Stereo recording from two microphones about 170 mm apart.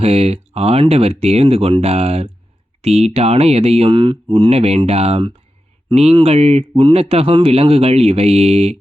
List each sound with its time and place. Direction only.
0.0 s speech: 35° right (ahead or behind)